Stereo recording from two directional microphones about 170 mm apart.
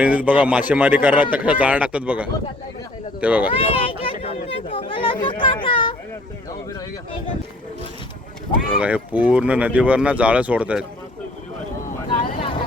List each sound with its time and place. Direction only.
0.0 s speech: 10° right (ahead or behind)
3.5 s speech: 35° left (ahead or behind)
8.7 s speech: 10° right (ahead or behind)
12.2 s vehicle: 30° left (ahead or behind)